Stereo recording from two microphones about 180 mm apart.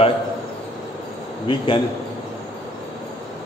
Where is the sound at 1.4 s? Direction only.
30° left (ahead or behind).